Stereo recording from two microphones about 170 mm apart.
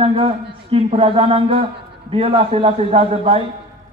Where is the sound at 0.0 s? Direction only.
30° right (ahead or behind).